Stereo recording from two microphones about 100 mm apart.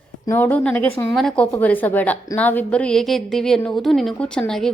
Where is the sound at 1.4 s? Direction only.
15° left (ahead or behind).